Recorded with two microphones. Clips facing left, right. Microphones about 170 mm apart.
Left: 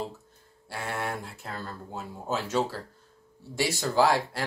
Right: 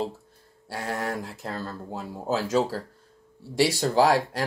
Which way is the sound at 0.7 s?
40° right (ahead or behind).